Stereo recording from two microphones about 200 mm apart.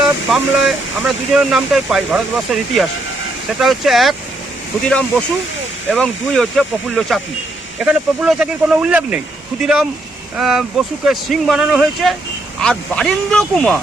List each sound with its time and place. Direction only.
0.3 s speech: centre (ahead or behind)